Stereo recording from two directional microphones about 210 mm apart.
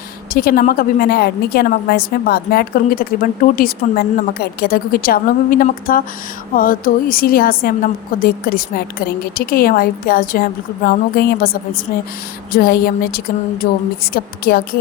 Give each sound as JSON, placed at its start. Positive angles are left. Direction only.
{"t": 0.3, "sound": "a woman's voice", "side_deg": 45}